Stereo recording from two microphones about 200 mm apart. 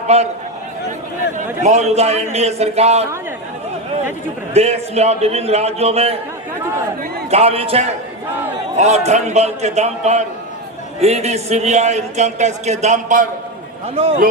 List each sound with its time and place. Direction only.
0.1 s a man's voice: 30° right (ahead or behind)
1.6 s a man's voice: 35° right (ahead or behind)
4.5 s a man's voice: 30° right (ahead or behind)
7.3 s a man's voice: 30° right (ahead or behind)